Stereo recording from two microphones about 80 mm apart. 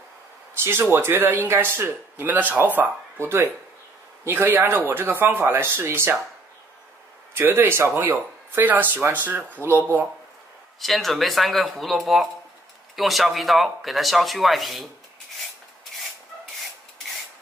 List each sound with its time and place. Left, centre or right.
0.6 s speech: right
7.3 s speech: right
10.8 s speech: centre